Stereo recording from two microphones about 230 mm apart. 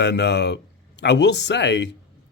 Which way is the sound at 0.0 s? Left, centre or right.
Left.